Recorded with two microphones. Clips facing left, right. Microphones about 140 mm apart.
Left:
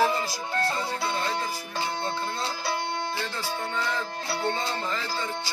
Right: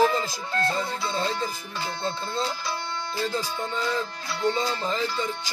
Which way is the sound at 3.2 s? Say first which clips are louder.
Right 3 dB; 20° right (ahead or behind).